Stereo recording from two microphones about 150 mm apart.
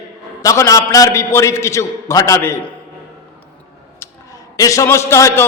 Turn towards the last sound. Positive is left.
turn(degrees=20)  # may be behind; listen again after turning